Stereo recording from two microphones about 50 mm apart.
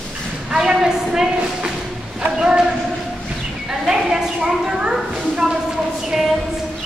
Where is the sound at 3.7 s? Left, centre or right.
Centre.